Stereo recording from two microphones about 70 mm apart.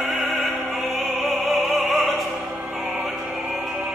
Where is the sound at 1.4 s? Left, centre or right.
Centre.